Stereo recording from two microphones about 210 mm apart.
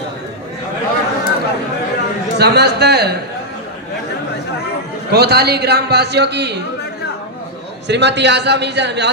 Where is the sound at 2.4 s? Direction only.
50° right (ahead or behind).